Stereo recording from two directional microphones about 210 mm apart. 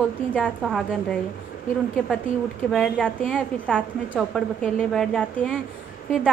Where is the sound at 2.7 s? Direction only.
5° left (ahead or behind).